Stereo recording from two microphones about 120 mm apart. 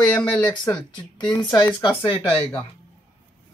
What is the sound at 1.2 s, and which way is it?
Speech, 35° left (ahead or behind).